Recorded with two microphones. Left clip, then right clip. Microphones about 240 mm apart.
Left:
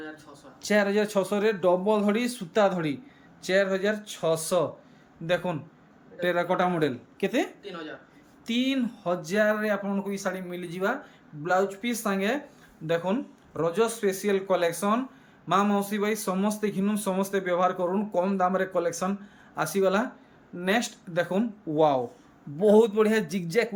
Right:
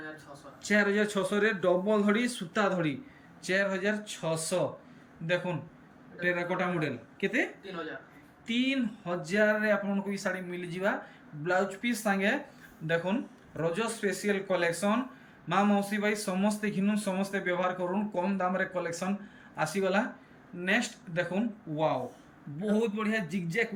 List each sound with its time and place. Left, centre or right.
0.6 s a man's voice: centre
8.4 s a man's voice: centre
13.6 s a man's voice: centre